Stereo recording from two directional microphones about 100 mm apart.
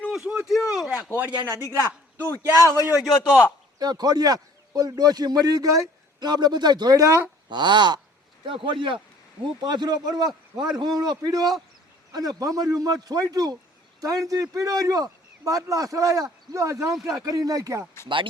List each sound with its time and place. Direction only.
0.1 s a sound: 5° right (ahead or behind)
1.1 s speech: 20° right (ahead or behind)
1.5 s a man's voice: 35° left (ahead or behind)
3.0 s a man's voice: centre (ahead or behind)
3.8 s a man's voice: 40° right (ahead or behind)
7.5 s a man's voice: 50° right (ahead or behind)
9.6 s a man's voice: 45° right (ahead or behind)